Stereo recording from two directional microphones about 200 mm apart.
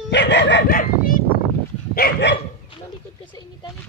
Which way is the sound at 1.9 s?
55° left (ahead or behind).